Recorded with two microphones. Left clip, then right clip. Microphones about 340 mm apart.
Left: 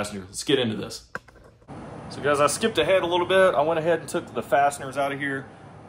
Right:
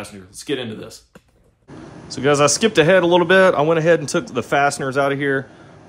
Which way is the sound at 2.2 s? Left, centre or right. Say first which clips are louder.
Right 6 dB; right.